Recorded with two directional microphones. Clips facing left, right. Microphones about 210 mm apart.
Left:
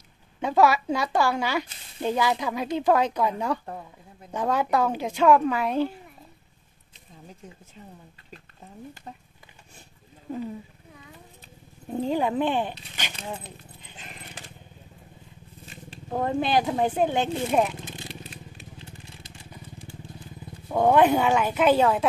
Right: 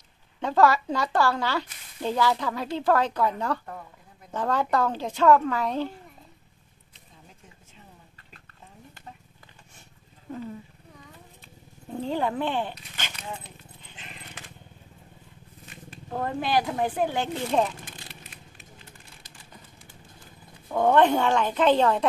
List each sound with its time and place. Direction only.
0.4 s speech: 10° left (ahead or behind)
12.0 s speech: 15° left (ahead or behind)
13.1 s speech: 30° left (ahead or behind)
13.9 s a sound: 40° left (ahead or behind)
15.6 s a sound: 30° left (ahead or behind)
16.1 s speech: 20° left (ahead or behind)
17.5 s speech: 10° left (ahead or behind)
17.8 s vehicle: 25° left (ahead or behind)
20.6 s speech: 10° left (ahead or behind)